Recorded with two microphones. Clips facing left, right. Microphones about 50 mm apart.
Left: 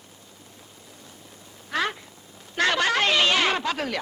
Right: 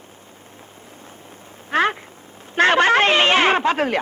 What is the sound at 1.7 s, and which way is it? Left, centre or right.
A man's voice, right.